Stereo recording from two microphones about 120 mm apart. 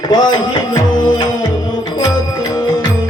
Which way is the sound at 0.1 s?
35° left (ahead or behind).